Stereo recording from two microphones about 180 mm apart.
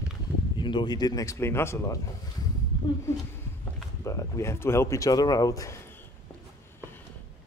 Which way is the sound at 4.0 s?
15° left (ahead or behind).